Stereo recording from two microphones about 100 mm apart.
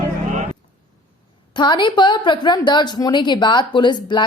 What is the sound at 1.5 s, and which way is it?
A woman's voice, 50° left (ahead or behind).